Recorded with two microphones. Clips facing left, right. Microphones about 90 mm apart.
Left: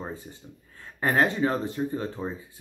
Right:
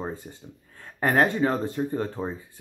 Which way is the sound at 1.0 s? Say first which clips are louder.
Right 2 dB; 35° right (ahead or behind).